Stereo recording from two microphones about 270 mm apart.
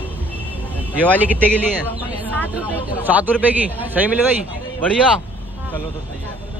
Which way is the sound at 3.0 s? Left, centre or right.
Centre.